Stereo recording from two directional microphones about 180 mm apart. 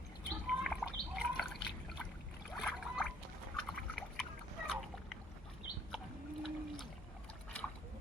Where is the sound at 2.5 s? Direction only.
5° left (ahead or behind).